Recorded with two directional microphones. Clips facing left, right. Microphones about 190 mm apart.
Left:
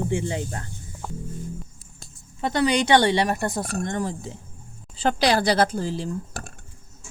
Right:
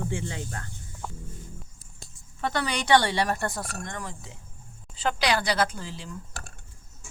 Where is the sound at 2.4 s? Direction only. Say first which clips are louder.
Left 7 dB; 20° left (ahead or behind).